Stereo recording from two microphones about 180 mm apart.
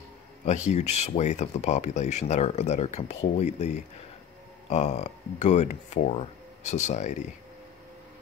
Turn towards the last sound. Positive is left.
turn(degrees=40)  # may be behind; listen again after turning